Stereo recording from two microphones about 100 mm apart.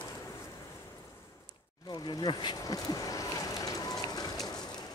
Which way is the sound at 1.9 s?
45° left (ahead or behind).